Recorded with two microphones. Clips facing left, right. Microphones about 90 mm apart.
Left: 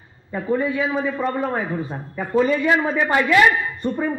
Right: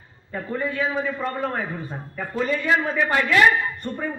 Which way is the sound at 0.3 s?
15° left (ahead or behind).